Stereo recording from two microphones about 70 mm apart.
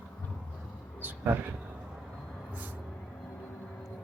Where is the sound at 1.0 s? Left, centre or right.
Right.